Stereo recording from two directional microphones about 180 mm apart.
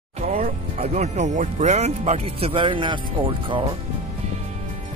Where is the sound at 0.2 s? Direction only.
45° right (ahead or behind).